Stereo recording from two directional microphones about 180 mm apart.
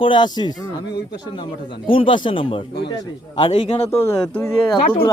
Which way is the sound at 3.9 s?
15° left (ahead or behind).